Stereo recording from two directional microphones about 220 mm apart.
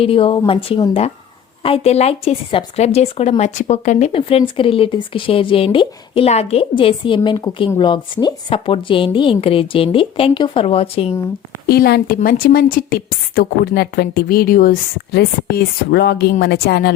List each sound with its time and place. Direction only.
0.0 s speech: 25° left (ahead or behind)
11.7 s a woman's voice: 45° left (ahead or behind)